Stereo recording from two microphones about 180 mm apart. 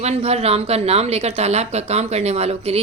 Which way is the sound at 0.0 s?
35° right (ahead or behind).